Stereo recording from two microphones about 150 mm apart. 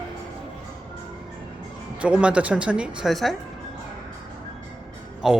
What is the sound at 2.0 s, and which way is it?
Speech, 5° right (ahead or behind).